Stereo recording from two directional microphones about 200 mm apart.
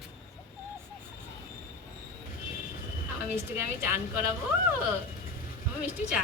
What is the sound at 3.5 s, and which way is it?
Speech, 10° right (ahead or behind).